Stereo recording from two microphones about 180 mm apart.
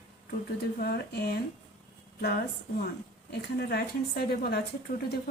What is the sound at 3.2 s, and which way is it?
A woman's voice, 65° left (ahead or behind).